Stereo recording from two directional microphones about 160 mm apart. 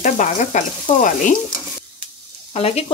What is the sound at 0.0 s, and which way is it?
Sizzle, 50° left (ahead or behind).